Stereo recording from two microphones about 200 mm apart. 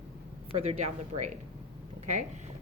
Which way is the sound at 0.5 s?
35° right (ahead or behind).